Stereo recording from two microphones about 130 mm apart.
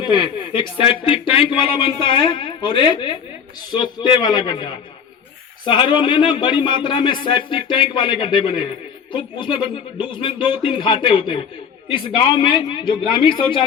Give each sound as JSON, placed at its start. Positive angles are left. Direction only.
{"t": 0.0, "sound": "speech", "side_deg": 35}